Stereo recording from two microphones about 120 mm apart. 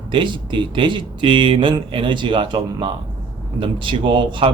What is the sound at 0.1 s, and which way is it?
Speech, 40° right (ahead or behind).